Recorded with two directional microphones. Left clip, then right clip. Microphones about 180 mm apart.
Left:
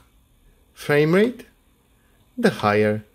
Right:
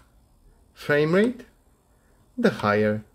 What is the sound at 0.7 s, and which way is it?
Speech, 20° left (ahead or behind).